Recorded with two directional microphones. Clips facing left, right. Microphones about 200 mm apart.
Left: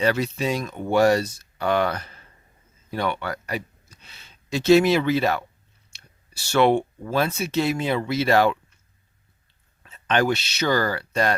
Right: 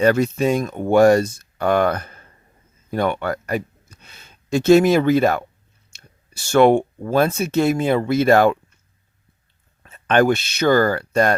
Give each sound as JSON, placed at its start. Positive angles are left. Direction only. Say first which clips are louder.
{"t": 0.0, "sound": "speech", "louder": "right 6 dB", "side_deg": -50}
{"t": 9.8, "sound": "speech", "louder": "right 6 dB", "side_deg": -50}